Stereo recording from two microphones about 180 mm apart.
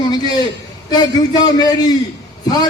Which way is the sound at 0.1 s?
20° left (ahead or behind).